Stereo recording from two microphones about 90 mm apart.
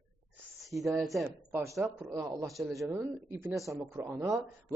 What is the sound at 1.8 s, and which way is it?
A man's voice, 25° right (ahead or behind).